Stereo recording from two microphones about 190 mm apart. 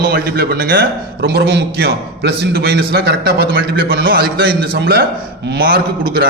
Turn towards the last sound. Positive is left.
turn(degrees=-50)  # may be behind; listen again after turning